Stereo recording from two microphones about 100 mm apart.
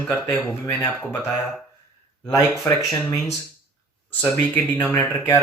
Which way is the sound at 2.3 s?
30° left (ahead or behind).